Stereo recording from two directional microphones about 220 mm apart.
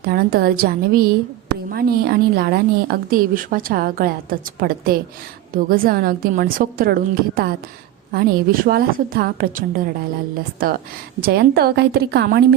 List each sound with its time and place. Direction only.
0.0 s a woman's voice: 45° right (ahead or behind)
11.2 s a woman's voice: 45° right (ahead or behind)